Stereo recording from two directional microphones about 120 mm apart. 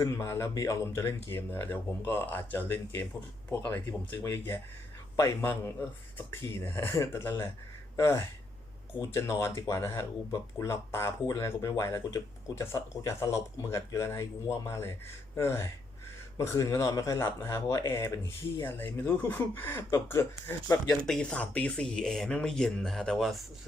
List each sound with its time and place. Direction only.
0.0 s speech: 30° left (ahead or behind)
20.9 s speech: 10° left (ahead or behind)